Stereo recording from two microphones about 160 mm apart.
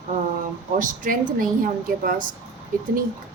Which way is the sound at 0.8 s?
55° right (ahead or behind).